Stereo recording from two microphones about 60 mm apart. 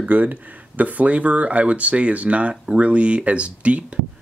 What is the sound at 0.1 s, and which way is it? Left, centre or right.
Speech, right.